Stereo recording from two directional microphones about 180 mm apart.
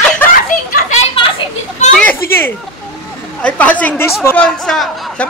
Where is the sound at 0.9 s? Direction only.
35° left (ahead or behind).